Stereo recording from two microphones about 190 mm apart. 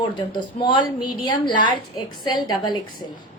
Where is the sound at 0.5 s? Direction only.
25° left (ahead or behind).